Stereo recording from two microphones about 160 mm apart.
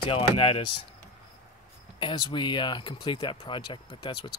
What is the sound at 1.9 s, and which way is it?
Speech, 30° left (ahead or behind).